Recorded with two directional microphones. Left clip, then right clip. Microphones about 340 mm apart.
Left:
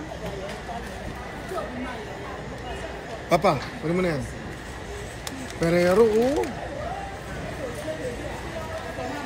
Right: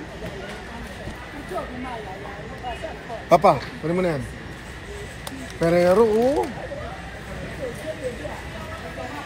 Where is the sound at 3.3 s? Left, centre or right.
Centre.